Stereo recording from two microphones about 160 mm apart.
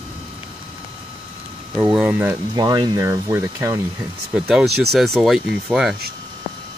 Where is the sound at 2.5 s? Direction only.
25° right (ahead or behind).